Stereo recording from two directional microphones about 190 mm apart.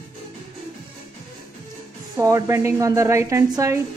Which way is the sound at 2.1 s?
15° right (ahead or behind).